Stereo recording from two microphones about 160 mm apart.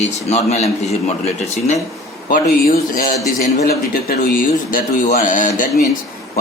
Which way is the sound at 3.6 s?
65° left (ahead or behind).